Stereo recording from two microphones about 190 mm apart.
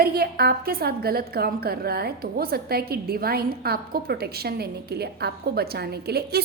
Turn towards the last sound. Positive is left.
turn(degrees=-60)  # may be behind; listen again after turning